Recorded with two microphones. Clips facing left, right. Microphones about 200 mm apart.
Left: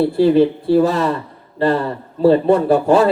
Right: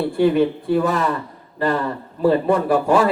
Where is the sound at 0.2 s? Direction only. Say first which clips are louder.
Left 2 dB; 30° left (ahead or behind).